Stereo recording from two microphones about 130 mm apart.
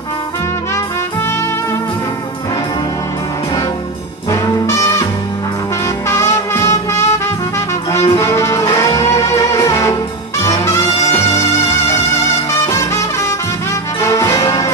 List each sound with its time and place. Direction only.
4.3 s brass instrument: 25° left (ahead or behind)
6.0 s music: 20° left (ahead or behind)
14.0 s music: 25° left (ahead or behind)